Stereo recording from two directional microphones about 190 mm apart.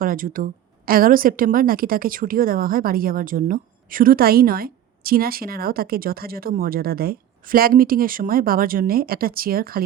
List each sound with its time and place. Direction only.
0.0 s a woman's voice: 50° right (ahead or behind)